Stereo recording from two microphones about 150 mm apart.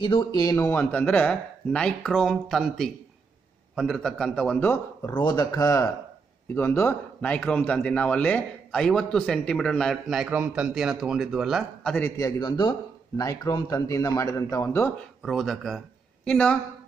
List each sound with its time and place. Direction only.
0.0 s a man's voice: 35° left (ahead or behind); by 5.1 s 15° left (ahead or behind)
5.1 s a man's voice: 30° left (ahead or behind); by 12.0 s 5° left (ahead or behind)
12.0 s a man's voice: 20° left (ahead or behind)
15.2 s a man's voice: centre (ahead or behind)